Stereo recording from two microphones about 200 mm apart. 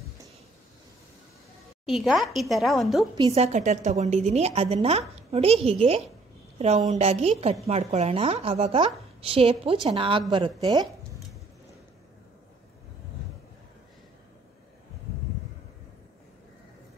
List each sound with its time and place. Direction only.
1.9 s a woman's voice: centre (ahead or behind)
3.3 s a woman's voice: 30° right (ahead or behind)